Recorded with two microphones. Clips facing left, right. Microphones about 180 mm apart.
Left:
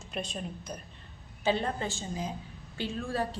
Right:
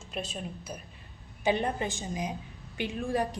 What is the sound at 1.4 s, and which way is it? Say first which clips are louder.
A woman's voice: right 1 dB; 15° right (ahead or behind).